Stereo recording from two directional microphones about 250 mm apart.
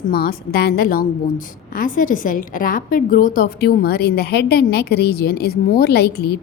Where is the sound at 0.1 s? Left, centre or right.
Left.